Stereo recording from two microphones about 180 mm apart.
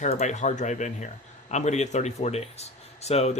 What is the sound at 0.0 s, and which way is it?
Speech, 40° left (ahead or behind).